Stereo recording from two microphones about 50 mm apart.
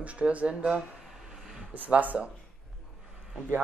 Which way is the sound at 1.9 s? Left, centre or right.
Right.